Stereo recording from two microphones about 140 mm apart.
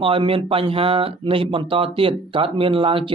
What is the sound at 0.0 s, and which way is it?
Speech, 40° right (ahead or behind).